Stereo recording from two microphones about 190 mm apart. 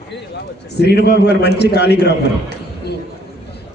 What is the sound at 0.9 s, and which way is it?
A man's voice, 60° left (ahead or behind).